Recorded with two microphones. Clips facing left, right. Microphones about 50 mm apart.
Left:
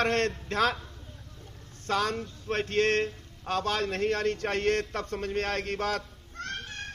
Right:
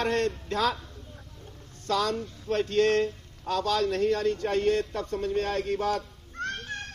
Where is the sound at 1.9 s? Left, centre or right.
Left.